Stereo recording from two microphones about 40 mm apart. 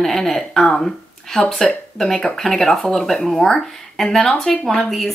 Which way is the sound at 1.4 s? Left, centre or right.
Left.